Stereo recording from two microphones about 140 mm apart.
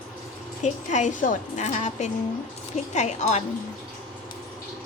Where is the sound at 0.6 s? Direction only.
60° left (ahead or behind).